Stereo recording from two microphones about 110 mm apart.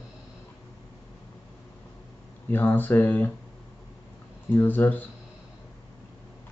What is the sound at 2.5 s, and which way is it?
Speech, 20° left (ahead or behind).